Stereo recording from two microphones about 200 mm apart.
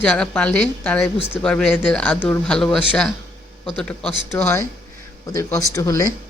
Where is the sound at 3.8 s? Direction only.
5° left (ahead or behind).